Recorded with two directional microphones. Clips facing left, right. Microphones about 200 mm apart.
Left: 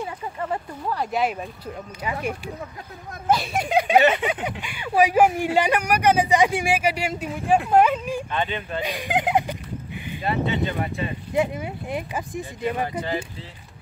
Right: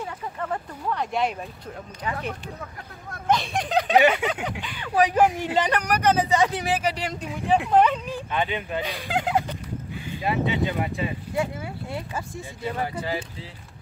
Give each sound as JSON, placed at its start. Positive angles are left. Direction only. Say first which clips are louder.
{"t": 0.0, "sound": "speech", "louder": "left 2 dB", "side_deg": 10}
{"t": 8.3, "sound": "speech", "louder": "even", "side_deg": -10}
{"t": 8.8, "sound": "speech", "louder": "left 3 dB", "side_deg": 15}
{"t": 10.2, "sound": "speech", "louder": "even", "side_deg": -15}
{"t": 11.3, "sound": "speech", "louder": "left 6 dB", "side_deg": 20}